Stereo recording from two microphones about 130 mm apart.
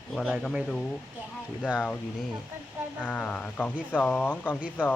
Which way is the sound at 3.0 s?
10° left (ahead or behind).